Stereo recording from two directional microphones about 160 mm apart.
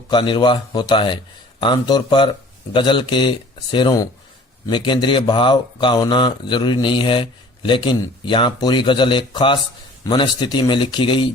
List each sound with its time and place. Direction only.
0.1 s a man's voice: 30° left (ahead or behind)